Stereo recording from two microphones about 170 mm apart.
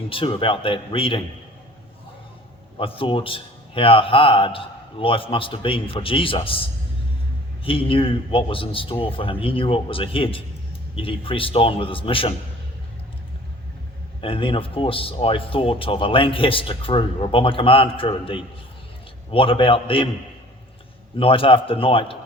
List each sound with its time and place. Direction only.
0.1 s speech: 30° left (ahead or behind)
2.7 s speech: 30° left (ahead or behind)
7.6 s speech: 30° left (ahead or behind)
14.2 s speech: 30° left (ahead or behind)
21.2 s speech: 30° left (ahead or behind)